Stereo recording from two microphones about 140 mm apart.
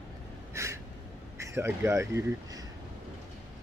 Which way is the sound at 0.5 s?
20° right (ahead or behind).